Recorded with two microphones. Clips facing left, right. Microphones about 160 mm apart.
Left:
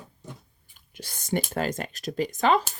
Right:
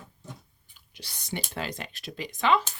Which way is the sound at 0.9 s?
45° left (ahead or behind).